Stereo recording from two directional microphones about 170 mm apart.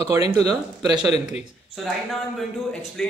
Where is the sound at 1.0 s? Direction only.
40° left (ahead or behind).